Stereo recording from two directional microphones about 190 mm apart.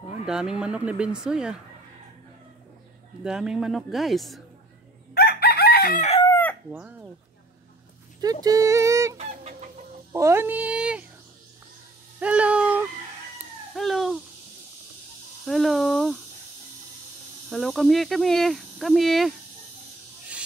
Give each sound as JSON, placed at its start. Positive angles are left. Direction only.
{"t": 0.3, "sound": "speech", "side_deg": -5}
{"t": 3.3, "sound": "speech", "side_deg": -5}
{"t": 5.1, "sound": "chicken", "side_deg": 55}
{"t": 6.7, "sound": "chicken", "side_deg": -10}
{"t": 8.2, "sound": "music", "side_deg": -20}
{"t": 10.1, "sound": "speech", "side_deg": -15}
{"t": 12.2, "sound": "a sound", "side_deg": -5}
{"t": 15.4, "sound": "a sound", "side_deg": 0}
{"t": 17.5, "sound": "speech", "side_deg": 0}